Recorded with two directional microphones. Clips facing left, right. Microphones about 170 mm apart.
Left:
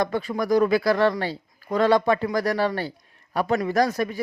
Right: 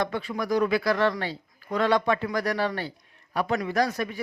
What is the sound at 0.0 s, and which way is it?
Speech, 40° left (ahead or behind).